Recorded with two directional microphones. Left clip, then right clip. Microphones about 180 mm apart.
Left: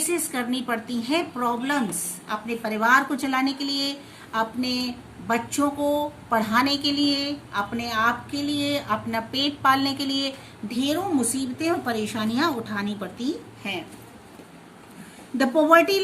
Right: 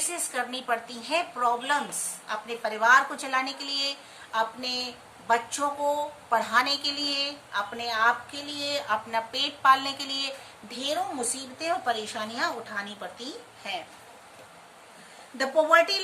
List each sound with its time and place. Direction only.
0.1 s a woman's voice: 15° left (ahead or behind)
15.4 s a woman's voice: 15° left (ahead or behind)